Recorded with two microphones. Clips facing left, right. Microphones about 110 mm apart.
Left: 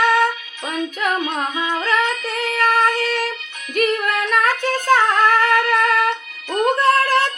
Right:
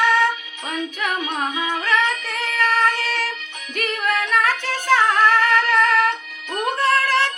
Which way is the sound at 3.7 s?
50° left (ahead or behind).